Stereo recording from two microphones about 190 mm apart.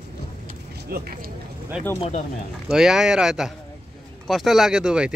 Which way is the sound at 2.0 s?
35° left (ahead or behind).